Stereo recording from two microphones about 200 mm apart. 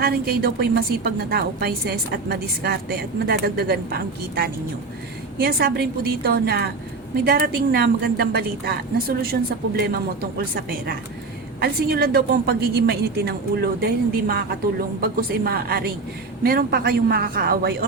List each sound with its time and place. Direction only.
0.0 s a woman's voice: 50° right (ahead or behind)